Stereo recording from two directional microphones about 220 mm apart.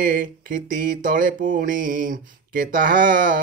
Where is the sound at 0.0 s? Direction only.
35° right (ahead or behind).